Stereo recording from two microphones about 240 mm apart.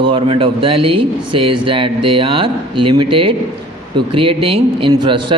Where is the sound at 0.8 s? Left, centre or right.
Right.